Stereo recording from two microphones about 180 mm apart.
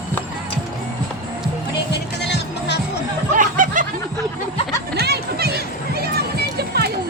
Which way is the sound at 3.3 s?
45° right (ahead or behind).